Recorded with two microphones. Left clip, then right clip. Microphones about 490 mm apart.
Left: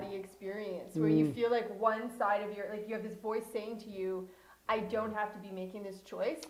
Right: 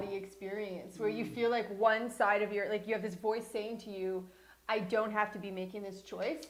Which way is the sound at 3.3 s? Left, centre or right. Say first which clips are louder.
Even; right.